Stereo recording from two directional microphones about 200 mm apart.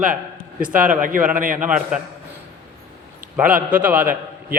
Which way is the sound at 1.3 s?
40° right (ahead or behind).